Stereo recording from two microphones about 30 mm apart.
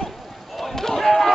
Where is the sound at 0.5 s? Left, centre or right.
Centre.